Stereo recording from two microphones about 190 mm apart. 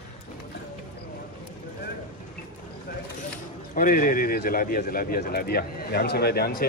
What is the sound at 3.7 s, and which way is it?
A man's voice, 50° left (ahead or behind).